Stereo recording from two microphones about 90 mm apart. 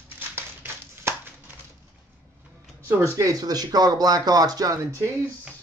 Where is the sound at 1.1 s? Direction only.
30° right (ahead or behind).